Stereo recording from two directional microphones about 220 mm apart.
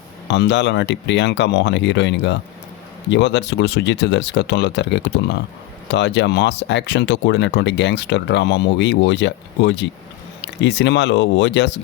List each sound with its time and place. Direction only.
0.3 s speech: 50° left (ahead or behind)